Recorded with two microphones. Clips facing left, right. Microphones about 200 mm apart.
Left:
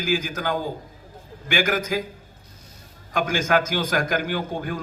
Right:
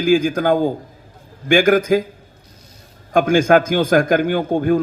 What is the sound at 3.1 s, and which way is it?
A man's voice, 50° right (ahead or behind).